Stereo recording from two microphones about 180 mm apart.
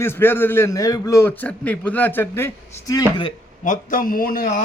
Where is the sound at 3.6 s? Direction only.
45° left (ahead or behind).